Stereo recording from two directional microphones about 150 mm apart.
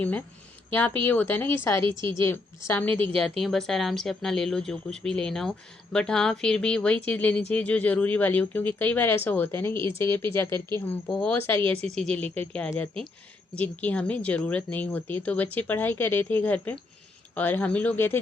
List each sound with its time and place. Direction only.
1.0 s speech: 15° left (ahead or behind)
3.2 s speech: centre (ahead or behind)